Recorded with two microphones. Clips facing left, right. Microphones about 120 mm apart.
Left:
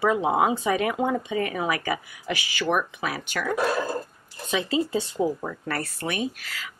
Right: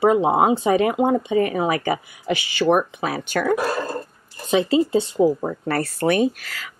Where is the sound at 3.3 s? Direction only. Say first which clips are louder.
Right 9 dB; 45° right (ahead or behind).